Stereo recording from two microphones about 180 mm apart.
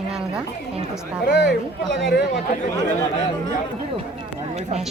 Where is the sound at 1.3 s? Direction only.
80° left.